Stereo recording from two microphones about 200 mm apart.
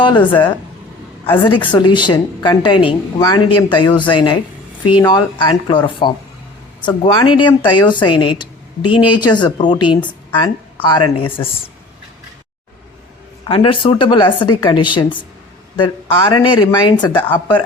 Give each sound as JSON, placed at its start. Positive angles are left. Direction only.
{"t": 0.0, "sound": "a woman's voice", "side_deg": 25}
{"t": 13.5, "sound": "a woman's voice", "side_deg": 25}
{"t": 16.3, "sound": "a woman's voice", "side_deg": 20}